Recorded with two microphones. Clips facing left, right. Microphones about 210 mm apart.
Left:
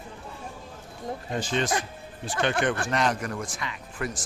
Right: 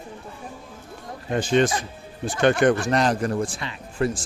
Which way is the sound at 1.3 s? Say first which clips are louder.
Right 9 dB; 55° right (ahead or behind).